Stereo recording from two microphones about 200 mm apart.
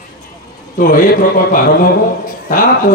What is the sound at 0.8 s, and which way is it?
A man's voice, 45° left (ahead or behind).